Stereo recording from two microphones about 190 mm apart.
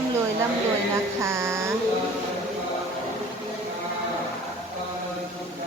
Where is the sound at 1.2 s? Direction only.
15° right (ahead or behind).